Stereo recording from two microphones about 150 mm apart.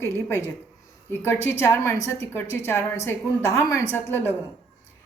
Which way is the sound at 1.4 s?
15° left (ahead or behind).